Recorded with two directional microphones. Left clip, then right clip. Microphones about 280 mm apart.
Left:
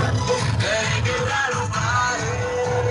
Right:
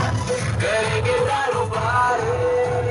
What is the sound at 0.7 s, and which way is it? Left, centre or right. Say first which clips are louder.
Music: right 3 dB; centre.